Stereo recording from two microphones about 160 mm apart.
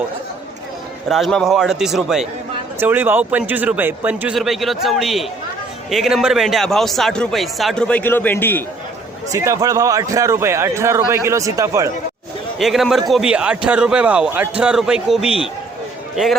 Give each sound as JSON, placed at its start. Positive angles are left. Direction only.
{"t": 1.0, "sound": "a man's voice", "side_deg": 0}
{"t": 9.3, "sound": "speech", "side_deg": -20}
{"t": 12.5, "sound": "a man's voice", "side_deg": 0}